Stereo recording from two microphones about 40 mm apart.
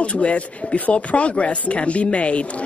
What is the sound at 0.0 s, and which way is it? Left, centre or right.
A man's voice, left.